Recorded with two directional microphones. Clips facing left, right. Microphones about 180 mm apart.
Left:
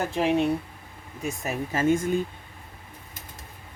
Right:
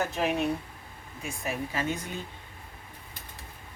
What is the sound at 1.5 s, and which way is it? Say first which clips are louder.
Speech: left 7 dB; 45° left (ahead or behind).